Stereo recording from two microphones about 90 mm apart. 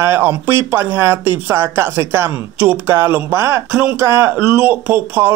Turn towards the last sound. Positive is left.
turn(degrees=-20)  # may be behind; listen again after turning